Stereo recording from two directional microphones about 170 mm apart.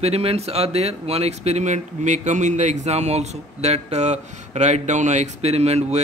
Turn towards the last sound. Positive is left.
turn(degrees=-40)  # may be behind; listen again after turning